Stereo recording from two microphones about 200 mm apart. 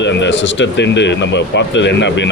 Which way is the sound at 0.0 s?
60° left (ahead or behind).